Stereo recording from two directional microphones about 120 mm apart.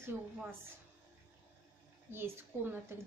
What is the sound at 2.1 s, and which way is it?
Speech, 20° right (ahead or behind).